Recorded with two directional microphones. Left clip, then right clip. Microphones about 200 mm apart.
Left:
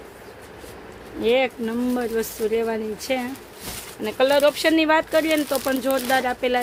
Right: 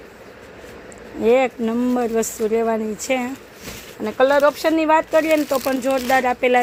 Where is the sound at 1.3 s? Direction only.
10° right (ahead or behind).